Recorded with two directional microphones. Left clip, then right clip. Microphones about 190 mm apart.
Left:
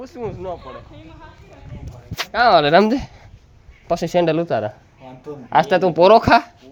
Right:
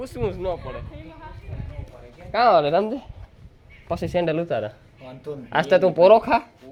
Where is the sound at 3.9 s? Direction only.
25° left (ahead or behind).